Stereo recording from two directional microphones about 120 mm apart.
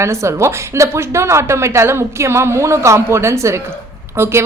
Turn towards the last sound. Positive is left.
turn(degrees=-20)  # may be behind; listen again after turning